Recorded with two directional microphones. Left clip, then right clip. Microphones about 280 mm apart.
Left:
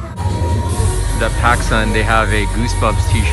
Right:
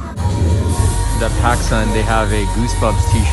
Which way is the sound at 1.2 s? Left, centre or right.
Centre.